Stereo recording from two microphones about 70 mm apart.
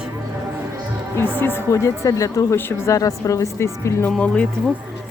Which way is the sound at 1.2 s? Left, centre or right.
Left.